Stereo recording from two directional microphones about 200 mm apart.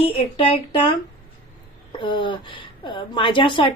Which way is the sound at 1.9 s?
25° left (ahead or behind).